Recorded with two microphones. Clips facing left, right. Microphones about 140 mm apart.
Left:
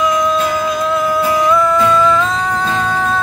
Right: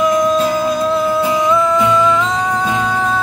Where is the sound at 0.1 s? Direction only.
45° right (ahead or behind).